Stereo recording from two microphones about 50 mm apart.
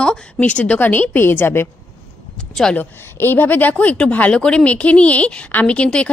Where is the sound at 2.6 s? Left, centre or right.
Centre.